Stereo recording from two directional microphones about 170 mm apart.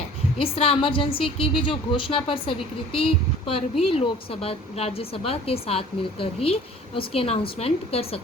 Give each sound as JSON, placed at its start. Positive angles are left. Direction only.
{"t": 0.3, "sound": "a woman's voice", "side_deg": 35}